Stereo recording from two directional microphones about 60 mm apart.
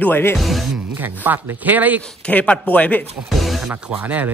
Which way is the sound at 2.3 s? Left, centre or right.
Left.